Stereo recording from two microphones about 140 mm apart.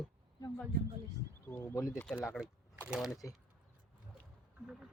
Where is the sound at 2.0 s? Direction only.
5° left (ahead or behind).